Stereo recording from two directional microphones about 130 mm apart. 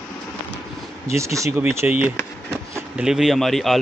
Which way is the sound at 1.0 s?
20° right (ahead or behind).